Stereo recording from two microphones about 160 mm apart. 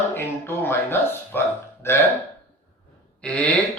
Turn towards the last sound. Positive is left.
turn(degrees=5)  # may be behind; listen again after turning